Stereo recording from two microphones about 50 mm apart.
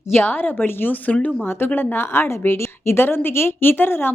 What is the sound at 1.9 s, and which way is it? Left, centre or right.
A woman's voice, left.